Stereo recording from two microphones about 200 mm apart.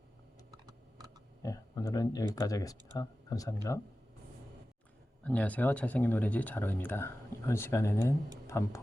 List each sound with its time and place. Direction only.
1.4 s speech: 15° left (ahead or behind)
5.2 s speech: 5° left (ahead or behind)